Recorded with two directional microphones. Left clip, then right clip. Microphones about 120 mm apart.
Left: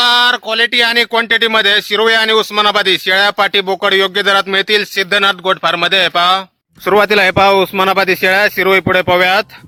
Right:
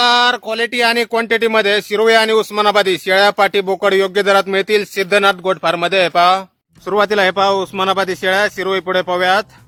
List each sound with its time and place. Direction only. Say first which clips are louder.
0.0 s speech: left 2 dB; centre (ahead or behind)
6.8 s speech: left 4 dB; 40° left (ahead or behind); by 9.5 s 20° left (ahead or behind)